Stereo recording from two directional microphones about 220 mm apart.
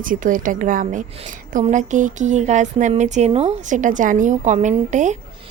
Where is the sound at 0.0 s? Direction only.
35° right (ahead or behind).